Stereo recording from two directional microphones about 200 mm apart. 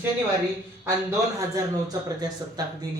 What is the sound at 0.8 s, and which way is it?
A man's voice, 15° right (ahead or behind).